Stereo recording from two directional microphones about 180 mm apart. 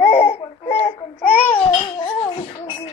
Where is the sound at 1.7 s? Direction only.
25° left (ahead or behind).